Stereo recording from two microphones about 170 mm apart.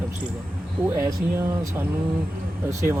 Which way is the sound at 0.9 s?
20° right (ahead or behind).